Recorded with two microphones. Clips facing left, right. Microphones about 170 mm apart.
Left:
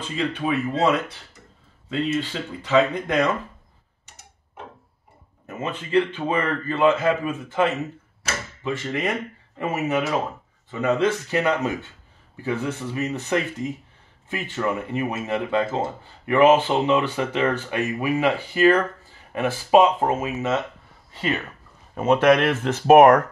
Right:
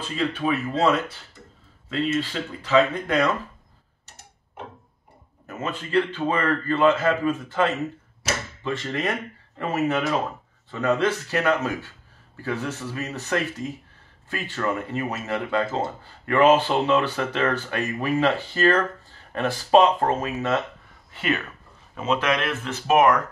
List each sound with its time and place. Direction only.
0.4 s speech: 10° left (ahead or behind)
2.6 s speech: 10° left (ahead or behind)
5.5 s speech: 20° left (ahead or behind)
21.1 s speech: 30° left (ahead or behind)
21.9 s speech: 55° left (ahead or behind)